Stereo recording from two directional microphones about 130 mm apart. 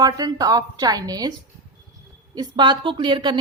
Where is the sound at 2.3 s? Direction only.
35° right (ahead or behind).